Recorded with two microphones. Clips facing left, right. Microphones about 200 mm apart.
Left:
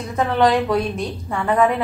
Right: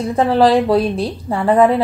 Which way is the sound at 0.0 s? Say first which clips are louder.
Right 5 dB; 30° right (ahead or behind).